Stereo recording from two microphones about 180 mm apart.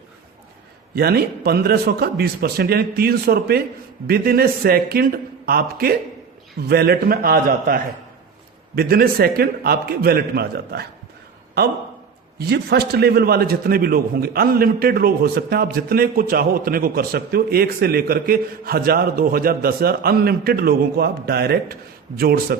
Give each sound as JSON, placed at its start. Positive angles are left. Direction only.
{"t": 0.9, "sound": "a man's voice", "side_deg": -60}
{"t": 12.5, "sound": "a man's voice", "side_deg": -65}